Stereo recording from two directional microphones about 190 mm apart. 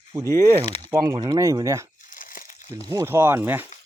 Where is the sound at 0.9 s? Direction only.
20° right (ahead or behind).